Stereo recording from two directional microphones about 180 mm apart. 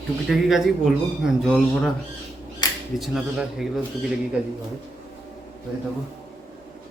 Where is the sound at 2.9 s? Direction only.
Centre (ahead or behind).